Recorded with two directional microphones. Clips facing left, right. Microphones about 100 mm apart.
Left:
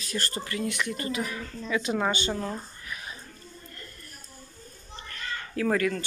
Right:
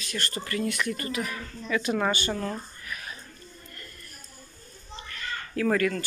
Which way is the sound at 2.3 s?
15° left (ahead or behind).